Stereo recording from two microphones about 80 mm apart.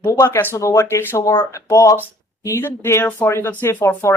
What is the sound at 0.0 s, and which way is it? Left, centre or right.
Speech, left.